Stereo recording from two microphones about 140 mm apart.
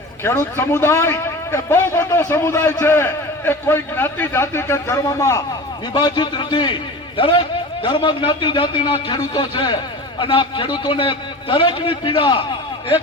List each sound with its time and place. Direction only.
0.3 s a man's voice: 20° left (ahead or behind)
5.9 s a man's voice: 30° left (ahead or behind)